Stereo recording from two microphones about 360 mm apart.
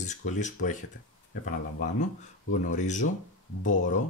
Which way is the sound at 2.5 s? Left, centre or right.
Left.